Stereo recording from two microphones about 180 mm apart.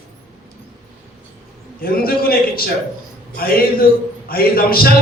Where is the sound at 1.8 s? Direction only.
55° left (ahead or behind).